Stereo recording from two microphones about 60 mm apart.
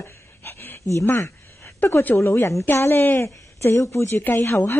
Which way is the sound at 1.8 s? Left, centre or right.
Left.